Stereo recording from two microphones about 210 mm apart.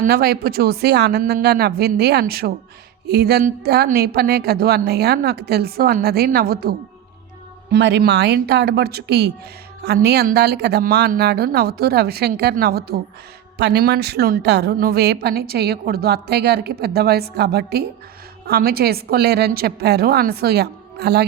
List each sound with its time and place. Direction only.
0.0 s a woman's voice: 45° right (ahead or behind)